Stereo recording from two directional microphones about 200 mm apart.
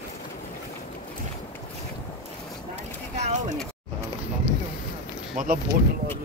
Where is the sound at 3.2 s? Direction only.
35° right (ahead or behind).